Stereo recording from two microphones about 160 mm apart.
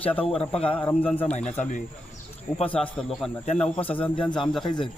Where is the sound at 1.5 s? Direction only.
50° left (ahead or behind).